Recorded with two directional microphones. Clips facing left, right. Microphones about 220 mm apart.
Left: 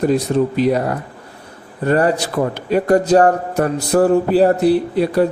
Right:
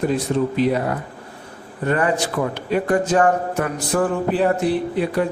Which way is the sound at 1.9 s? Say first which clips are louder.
Left 4 dB; 35° left (ahead or behind).